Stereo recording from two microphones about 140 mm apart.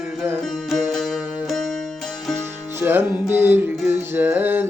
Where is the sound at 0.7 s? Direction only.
Centre (ahead or behind).